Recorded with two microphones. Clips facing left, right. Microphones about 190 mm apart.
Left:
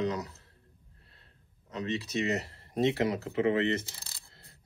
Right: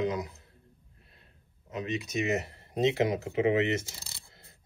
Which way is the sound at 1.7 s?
15° right (ahead or behind).